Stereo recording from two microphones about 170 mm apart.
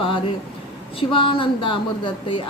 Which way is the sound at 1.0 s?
30° left (ahead or behind).